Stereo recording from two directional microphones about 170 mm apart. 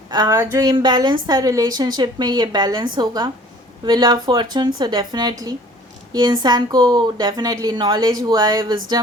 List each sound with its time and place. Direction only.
0.1 s a woman's voice: 20° right (ahead or behind)